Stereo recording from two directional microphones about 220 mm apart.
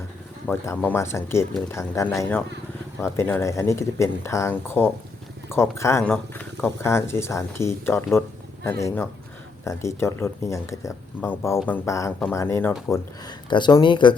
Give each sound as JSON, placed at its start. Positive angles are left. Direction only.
{"t": 0.4, "sound": "speech", "side_deg": 10}